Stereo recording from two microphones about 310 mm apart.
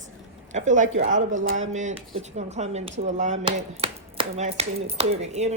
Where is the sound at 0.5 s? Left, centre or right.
Right.